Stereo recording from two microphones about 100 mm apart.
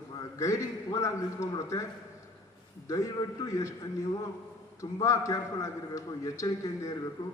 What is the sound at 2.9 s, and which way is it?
A man's voice, 35° left (ahead or behind).